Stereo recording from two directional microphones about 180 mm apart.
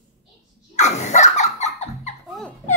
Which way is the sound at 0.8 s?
40° left (ahead or behind).